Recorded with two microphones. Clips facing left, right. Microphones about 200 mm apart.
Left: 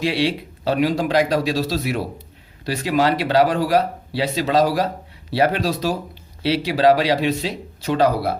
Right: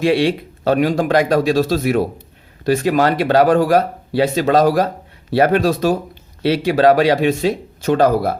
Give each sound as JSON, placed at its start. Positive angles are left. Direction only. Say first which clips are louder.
{"t": 0.0, "sound": "a man's voice", "louder": "right 5 dB", "side_deg": -50}